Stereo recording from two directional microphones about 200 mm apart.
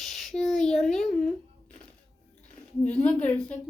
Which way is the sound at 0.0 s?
Centre (ahead or behind).